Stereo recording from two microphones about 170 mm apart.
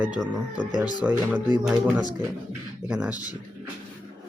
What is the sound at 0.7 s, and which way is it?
Speech, 25° left (ahead or behind).